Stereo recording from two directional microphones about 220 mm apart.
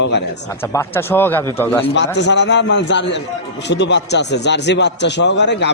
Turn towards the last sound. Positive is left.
turn(degrees=50)  # may be behind; listen again after turning